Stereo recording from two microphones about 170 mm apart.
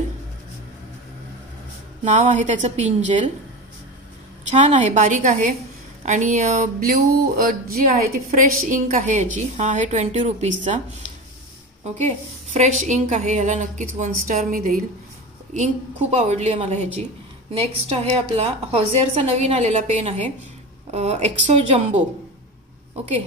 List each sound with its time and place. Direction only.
2.0 s a woman's voice: 45° right (ahead or behind)
4.5 s a woman's voice: 45° right (ahead or behind)
12.5 s a woman's voice: 45° right (ahead or behind)